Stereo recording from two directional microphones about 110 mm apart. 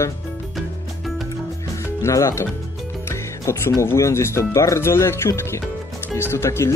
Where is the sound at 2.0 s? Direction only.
30° left (ahead or behind).